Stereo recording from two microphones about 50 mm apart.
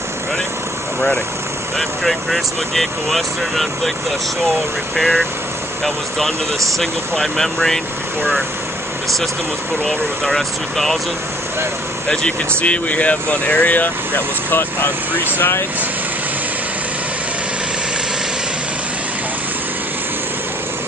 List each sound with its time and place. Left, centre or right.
1.8 s speech: centre
4.9 s speech: centre
9.8 s speech: centre
12.1 s speech: centre
12.6 s speech: left